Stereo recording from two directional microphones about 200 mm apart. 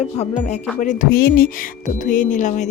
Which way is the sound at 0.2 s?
35° left (ahead or behind).